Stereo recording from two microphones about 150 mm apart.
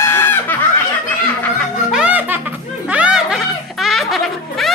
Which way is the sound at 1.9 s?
5° right (ahead or behind).